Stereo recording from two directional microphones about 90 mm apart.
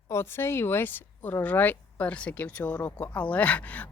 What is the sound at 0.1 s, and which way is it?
Speech, 30° left (ahead or behind).